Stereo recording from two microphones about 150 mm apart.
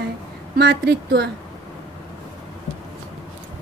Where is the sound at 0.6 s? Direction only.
90° right.